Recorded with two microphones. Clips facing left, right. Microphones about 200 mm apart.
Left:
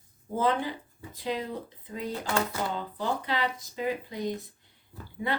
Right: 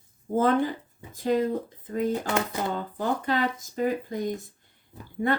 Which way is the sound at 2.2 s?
20° right (ahead or behind).